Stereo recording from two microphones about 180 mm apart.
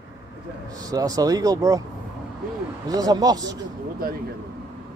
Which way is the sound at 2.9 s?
20° right (ahead or behind).